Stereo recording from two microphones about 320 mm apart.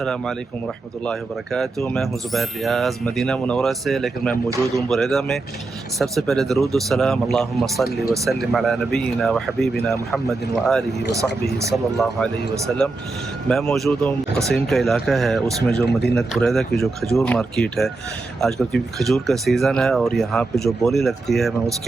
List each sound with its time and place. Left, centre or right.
0.0 s speech: centre
1.5 s speech: centre
15.9 s a man's voice: left
16.1 s speech: centre